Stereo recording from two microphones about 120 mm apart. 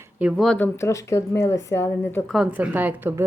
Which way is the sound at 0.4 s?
10° left (ahead or behind).